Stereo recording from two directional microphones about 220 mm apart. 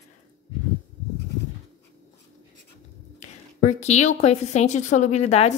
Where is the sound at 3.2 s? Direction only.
30° left (ahead or behind).